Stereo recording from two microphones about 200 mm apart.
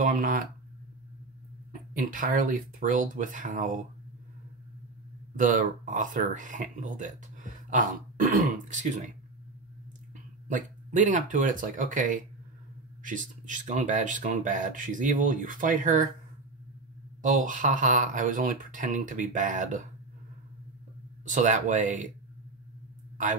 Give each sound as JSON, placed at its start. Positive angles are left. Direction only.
{"t": 0.0, "sound": "speech", "side_deg": -40}
{"t": 1.7, "sound": "speech", "side_deg": -45}
{"t": 5.3, "sound": "speech", "side_deg": -40}
{"t": 10.5, "sound": "speech", "side_deg": -40}
{"t": 17.2, "sound": "speech", "side_deg": -40}
{"t": 21.3, "sound": "speech", "side_deg": -40}